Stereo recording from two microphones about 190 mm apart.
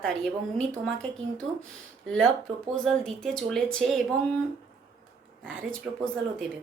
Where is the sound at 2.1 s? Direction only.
5° left (ahead or behind).